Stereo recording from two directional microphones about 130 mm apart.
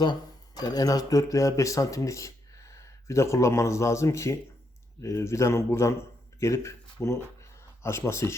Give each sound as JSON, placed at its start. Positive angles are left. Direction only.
{"t": 0.0, "sound": "speech", "side_deg": 30}